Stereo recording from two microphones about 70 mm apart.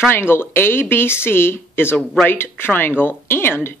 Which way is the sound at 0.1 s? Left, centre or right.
Left.